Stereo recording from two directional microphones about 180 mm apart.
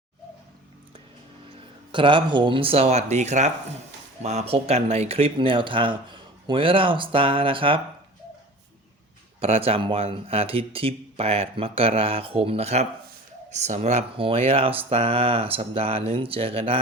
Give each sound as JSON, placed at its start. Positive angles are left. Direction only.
{"t": 1.9, "sound": "speech", "side_deg": -25}
{"t": 9.4, "sound": "speech", "side_deg": -30}